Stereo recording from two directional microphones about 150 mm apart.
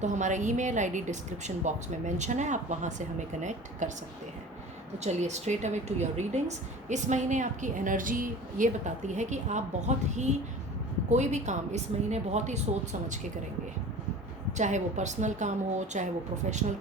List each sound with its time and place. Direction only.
0.0 s a woman's voice: 55° right (ahead or behind)
5.0 s a woman's voice: 50° right (ahead or behind)
14.5 s a woman's voice: 55° right (ahead or behind)